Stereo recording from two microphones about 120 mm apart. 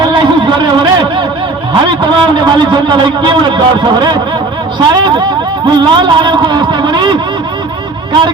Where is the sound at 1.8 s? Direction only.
40° right (ahead or behind).